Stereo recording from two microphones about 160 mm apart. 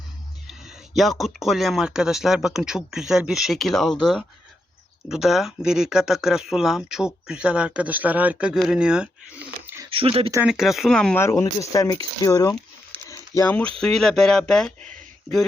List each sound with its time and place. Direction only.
0.4 s a sound: 5° right (ahead or behind)
1.2 s speech: centre (ahead or behind)
9.9 s speech: 35° right (ahead or behind)
10.4 s speech: 5° right (ahead or behind)
11.2 s speech: 15° left (ahead or behind)